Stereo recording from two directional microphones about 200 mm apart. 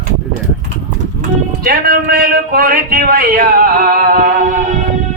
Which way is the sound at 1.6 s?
50° right (ahead or behind).